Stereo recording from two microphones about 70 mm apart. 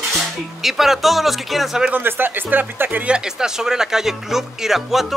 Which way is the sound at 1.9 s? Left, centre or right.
Right.